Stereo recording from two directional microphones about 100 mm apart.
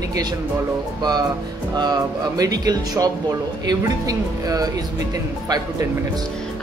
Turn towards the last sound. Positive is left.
turn(degrees=-40)  # may be behind; listen again after turning